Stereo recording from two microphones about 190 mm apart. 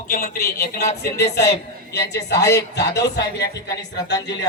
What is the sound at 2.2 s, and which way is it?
Speech, 15° left (ahead or behind).